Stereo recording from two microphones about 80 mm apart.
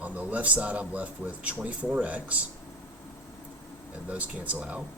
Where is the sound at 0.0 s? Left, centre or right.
Centre.